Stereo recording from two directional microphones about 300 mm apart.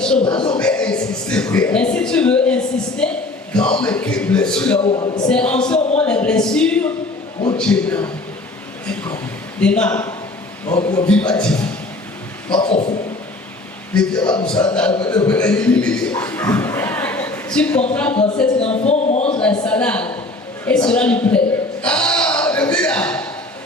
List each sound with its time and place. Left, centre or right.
0.0 s speech: centre
0.3 s a man's voice: centre
0.6 s a man's voice: centre
4.8 s a man's voice: centre
5.3 s a man's voice: centre
13.9 s a man's voice: centre
18.5 s speech: centre
19.4 s a man's voice: centre